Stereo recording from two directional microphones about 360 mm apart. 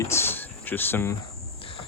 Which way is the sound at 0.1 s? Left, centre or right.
Centre.